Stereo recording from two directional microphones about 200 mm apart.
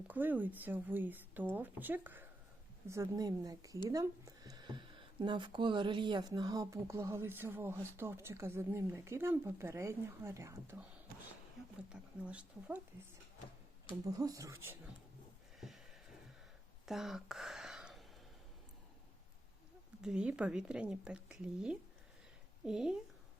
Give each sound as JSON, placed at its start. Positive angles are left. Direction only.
{"t": 0.1, "sound": "speech", "side_deg": -10}
{"t": 11.9, "sound": "a woman's voice", "side_deg": -5}
{"t": 14.0, "sound": "speech", "side_deg": -15}
{"t": 16.8, "sound": "a sound", "side_deg": 0}
{"t": 20.0, "sound": "a woman's voice", "side_deg": -5}